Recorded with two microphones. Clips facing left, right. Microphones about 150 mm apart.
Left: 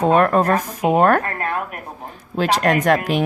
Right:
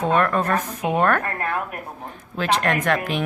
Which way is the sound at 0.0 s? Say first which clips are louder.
Left 5 dB; 35° left (ahead or behind).